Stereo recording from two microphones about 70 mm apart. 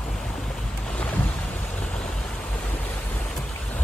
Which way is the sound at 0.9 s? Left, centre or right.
Left.